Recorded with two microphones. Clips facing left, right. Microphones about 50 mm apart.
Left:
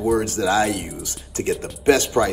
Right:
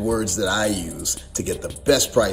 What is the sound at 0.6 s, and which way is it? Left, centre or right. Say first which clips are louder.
Speech: right 1 dB; left.